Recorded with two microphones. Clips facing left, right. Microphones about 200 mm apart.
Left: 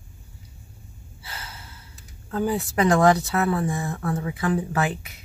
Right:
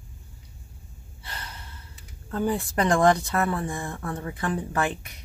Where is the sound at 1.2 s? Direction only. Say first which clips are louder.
Even; 5° left (ahead or behind).